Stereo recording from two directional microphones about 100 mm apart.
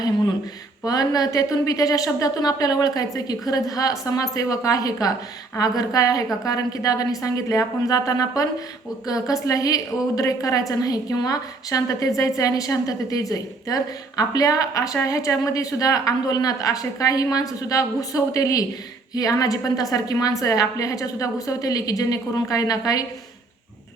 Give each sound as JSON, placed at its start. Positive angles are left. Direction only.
{"t": 0.9, "sound": "a woman's voice", "side_deg": 40}